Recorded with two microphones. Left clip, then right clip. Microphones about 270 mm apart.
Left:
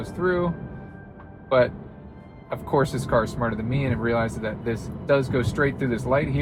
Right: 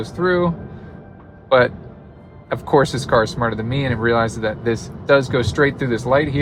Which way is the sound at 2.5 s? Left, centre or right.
Right.